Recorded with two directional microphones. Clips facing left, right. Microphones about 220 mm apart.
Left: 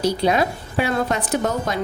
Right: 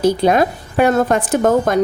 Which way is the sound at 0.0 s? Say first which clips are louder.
Right 5 dB; 50° right (ahead or behind).